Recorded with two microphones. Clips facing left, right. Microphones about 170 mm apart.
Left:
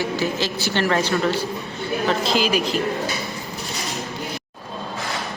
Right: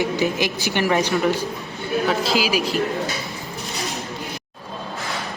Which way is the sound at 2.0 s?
5° right (ahead or behind).